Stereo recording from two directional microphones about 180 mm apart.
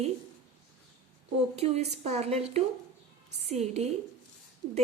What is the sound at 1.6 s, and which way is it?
A woman's voice, 35° right (ahead or behind).